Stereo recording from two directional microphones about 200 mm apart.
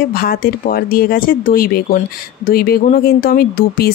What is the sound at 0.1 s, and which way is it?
Speech, 45° left (ahead or behind).